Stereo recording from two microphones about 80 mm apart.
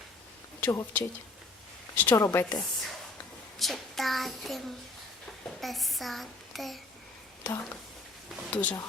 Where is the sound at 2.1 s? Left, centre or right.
Left.